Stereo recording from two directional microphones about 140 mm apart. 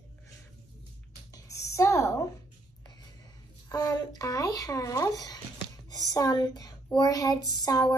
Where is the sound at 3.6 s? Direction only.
25° left (ahead or behind).